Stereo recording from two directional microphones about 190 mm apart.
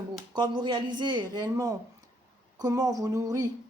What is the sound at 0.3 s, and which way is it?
Speech, 25° right (ahead or behind).